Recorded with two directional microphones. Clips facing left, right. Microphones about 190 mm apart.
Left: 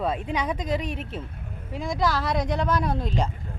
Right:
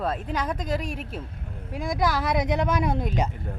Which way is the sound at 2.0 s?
15° right (ahead or behind).